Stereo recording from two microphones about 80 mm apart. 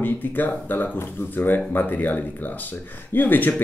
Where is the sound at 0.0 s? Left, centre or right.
Left.